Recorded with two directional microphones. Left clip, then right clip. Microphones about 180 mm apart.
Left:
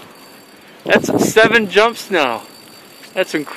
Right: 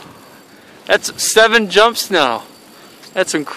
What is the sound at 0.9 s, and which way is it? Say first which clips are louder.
Speech: left 1 dB; 5° right (ahead or behind).